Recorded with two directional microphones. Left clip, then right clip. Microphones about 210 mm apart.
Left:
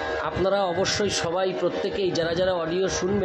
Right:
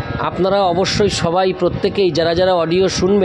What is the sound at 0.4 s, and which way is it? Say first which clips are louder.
A man's voice: right 9 dB; 40° right (ahead or behind).